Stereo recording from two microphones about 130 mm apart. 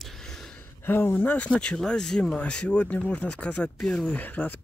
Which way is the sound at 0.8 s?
15° left (ahead or behind).